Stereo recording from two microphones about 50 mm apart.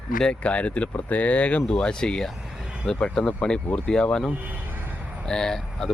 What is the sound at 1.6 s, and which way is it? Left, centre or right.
Speech, centre.